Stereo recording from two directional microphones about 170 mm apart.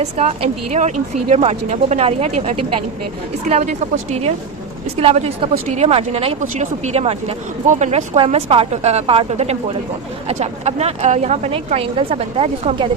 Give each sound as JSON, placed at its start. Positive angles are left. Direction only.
{"t": 0.0, "sound": "speech", "side_deg": -40}